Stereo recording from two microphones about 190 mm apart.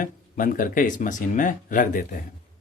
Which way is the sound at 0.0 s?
45° left (ahead or behind).